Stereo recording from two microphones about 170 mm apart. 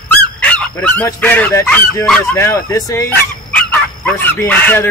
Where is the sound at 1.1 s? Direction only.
10° left (ahead or behind).